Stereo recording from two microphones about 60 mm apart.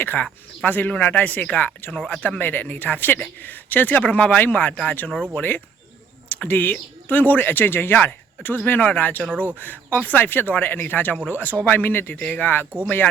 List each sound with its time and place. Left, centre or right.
0.0 s speech: left